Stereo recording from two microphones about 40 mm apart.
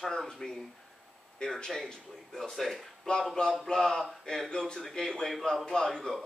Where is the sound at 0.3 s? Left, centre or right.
Centre.